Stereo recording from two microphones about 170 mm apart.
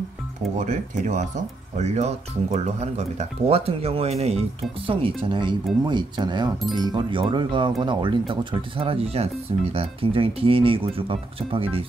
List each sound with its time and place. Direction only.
0.7 s speech: 45° right (ahead or behind)